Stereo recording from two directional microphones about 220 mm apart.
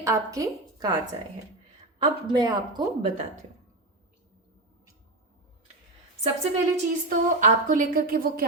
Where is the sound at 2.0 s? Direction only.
20° right (ahead or behind).